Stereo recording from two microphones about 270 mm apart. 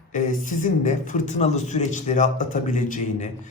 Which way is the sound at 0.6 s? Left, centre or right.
Left.